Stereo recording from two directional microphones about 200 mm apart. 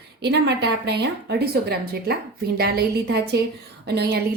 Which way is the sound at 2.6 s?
55° right (ahead or behind).